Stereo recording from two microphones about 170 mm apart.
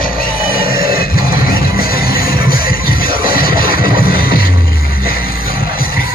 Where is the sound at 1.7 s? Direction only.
60° left (ahead or behind).